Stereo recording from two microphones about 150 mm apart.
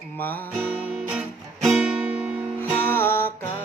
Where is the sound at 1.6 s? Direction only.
5° right (ahead or behind).